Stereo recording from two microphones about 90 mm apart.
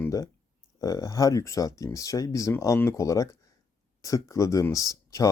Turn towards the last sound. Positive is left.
turn(degrees=40)  # may be behind; listen again after turning